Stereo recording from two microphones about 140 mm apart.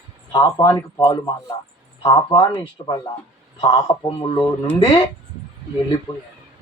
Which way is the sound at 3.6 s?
35° left (ahead or behind).